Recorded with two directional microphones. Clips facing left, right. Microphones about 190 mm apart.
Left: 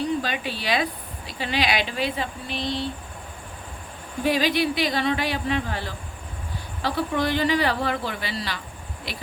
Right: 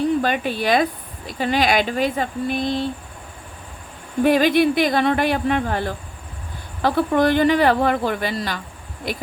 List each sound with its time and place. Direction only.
0.2 s speech: 50° right (ahead or behind)
4.2 s speech: 55° right (ahead or behind)